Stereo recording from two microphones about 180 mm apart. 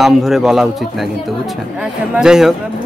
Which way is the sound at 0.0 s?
Centre (ahead or behind).